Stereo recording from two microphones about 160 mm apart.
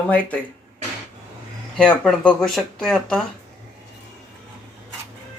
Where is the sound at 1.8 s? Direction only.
5° left (ahead or behind).